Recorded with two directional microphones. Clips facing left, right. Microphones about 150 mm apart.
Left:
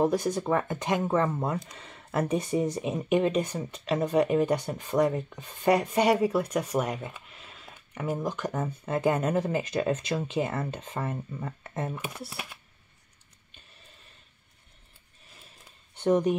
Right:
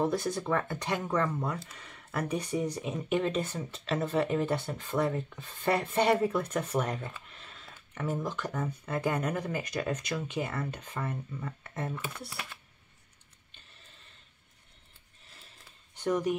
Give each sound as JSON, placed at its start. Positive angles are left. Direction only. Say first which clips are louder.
{"t": 0.0, "sound": "speech", "louder": "left 4 dB", "side_deg": 20}
{"t": 16.0, "sound": "speech", "louder": "left 5 dB", "side_deg": 25}